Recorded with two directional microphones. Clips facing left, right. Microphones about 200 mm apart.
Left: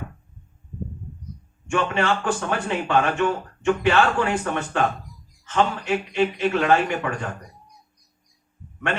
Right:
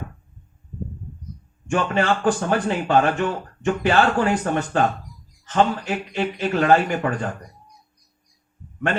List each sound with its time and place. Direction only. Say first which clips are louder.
1.7 s speech: right 2 dB; 40° right (ahead or behind)